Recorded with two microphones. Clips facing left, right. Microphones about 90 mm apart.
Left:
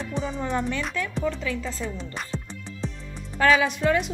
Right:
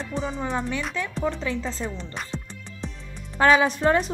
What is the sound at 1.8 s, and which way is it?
Speech, centre (ahead or behind).